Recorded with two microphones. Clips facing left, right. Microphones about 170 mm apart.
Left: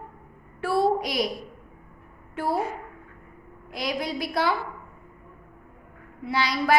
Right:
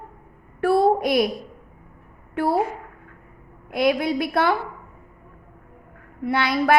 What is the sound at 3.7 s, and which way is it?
Speech, 55° right (ahead or behind).